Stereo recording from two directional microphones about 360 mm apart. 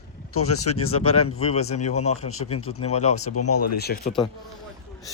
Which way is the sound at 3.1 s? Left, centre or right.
Left.